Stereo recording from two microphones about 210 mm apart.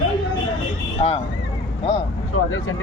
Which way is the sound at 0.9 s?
30° left (ahead or behind).